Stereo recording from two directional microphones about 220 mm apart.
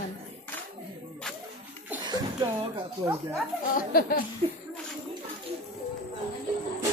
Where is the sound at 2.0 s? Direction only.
20° right (ahead or behind).